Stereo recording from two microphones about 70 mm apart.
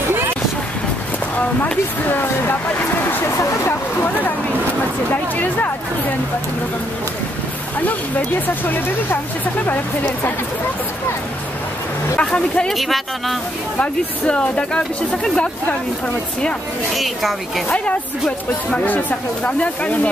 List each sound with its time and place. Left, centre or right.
1.6 s speech: left
8.6 s speech: left
12.2 s speech: centre
12.7 s speech: centre
13.7 s speech: centre
16.9 s speech: centre
17.6 s speech: left